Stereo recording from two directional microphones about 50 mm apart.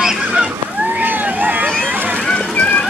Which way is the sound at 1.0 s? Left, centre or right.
Right.